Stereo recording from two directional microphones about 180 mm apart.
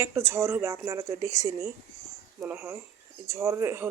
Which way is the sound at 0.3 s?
15° right (ahead or behind).